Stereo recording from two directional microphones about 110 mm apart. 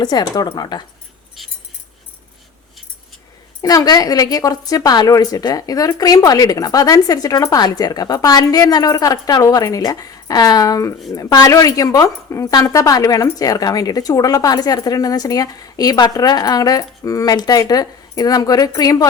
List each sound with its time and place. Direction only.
0.0 s speech: 40° left (ahead or behind)
3.6 s speech: 35° left (ahead or behind)